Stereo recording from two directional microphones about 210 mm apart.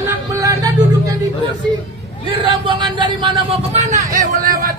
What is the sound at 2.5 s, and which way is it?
A man's voice, 20° right (ahead or behind).